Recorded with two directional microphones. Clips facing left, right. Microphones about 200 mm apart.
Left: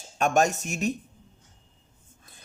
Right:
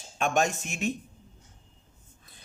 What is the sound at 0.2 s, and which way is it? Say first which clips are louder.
Speech: left 3 dB; 45° left (ahead or behind).